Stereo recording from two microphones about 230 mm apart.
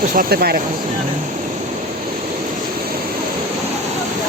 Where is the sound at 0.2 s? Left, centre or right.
Right.